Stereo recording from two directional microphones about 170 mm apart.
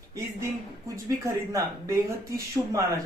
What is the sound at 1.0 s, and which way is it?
Speech, 15° right (ahead or behind).